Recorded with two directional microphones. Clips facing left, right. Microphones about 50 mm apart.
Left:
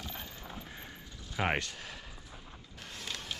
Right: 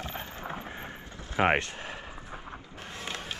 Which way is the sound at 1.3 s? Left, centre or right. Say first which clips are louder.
Right 7 dB; right.